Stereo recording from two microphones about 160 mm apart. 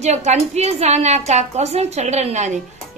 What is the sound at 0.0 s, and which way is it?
Speech, 45° right (ahead or behind).